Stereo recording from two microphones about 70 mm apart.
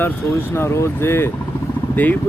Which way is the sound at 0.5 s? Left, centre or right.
Left.